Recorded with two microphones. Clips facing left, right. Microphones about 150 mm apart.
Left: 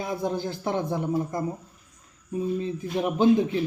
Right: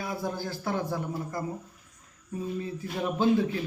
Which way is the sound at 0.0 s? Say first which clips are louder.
Left 5 dB; 20° left (ahead or behind).